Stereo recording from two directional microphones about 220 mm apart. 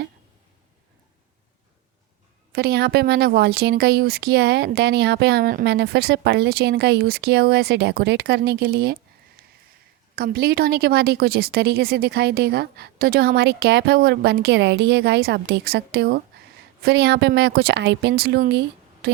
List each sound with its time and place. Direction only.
2.5 s a woman's voice: 45° right (ahead or behind)
10.2 s a woman's voice: 45° right (ahead or behind)